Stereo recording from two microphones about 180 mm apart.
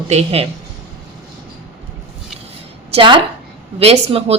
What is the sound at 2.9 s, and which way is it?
Speech, 25° right (ahead or behind).